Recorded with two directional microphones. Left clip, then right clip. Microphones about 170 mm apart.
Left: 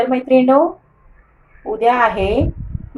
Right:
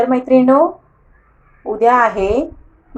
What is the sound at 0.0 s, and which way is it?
Speech, centre (ahead or behind).